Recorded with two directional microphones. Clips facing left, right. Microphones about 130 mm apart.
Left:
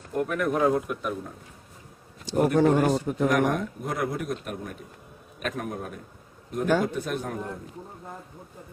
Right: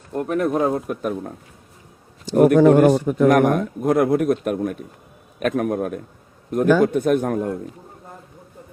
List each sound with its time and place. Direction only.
0.2 s speech: 30° right (ahead or behind)
2.3 s a man's voice: 75° right (ahead or behind); by 7.5 s 55° right (ahead or behind)